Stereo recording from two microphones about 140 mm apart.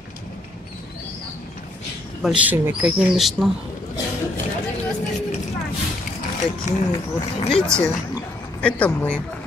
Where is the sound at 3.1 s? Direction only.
Centre (ahead or behind).